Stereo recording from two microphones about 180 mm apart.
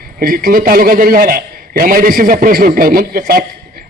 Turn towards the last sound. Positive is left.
turn(degrees=-55)  # may be behind; listen again after turning